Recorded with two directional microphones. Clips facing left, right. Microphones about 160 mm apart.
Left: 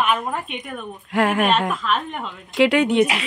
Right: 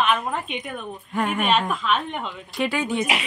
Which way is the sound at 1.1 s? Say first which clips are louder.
Left 6 dB; 90° left.